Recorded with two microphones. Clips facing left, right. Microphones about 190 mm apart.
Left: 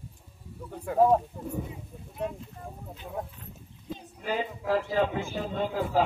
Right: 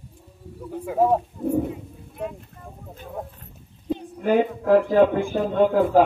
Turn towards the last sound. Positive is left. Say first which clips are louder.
# right 11 dB
turn(degrees=-55)  # may be behind; listen again after turning